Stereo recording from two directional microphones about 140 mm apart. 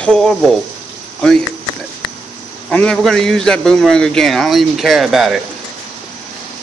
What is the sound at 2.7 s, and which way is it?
A man's voice, 5° left (ahead or behind).